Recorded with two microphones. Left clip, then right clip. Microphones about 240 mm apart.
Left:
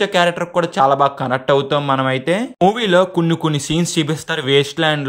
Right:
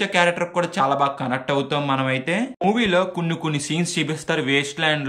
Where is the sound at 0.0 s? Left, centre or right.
Left.